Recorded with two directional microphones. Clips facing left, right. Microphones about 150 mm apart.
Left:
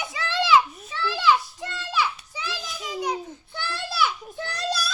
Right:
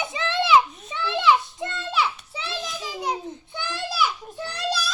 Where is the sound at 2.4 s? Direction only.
30° right (ahead or behind).